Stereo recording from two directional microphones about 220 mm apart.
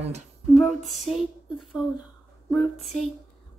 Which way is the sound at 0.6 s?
Centre (ahead or behind).